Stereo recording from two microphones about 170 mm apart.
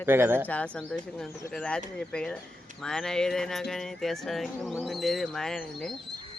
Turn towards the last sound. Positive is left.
turn(degrees=5)  # may be behind; listen again after turning